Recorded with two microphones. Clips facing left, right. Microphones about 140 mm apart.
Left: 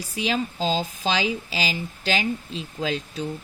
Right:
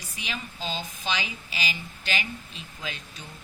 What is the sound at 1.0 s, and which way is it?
Speech, 90° left.